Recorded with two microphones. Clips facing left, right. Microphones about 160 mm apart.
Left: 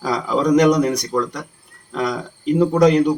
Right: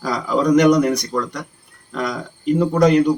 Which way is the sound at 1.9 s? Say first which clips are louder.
Left 2 dB; 5° left (ahead or behind).